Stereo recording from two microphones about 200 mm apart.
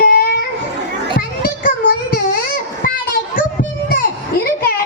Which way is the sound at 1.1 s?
50° left (ahead or behind).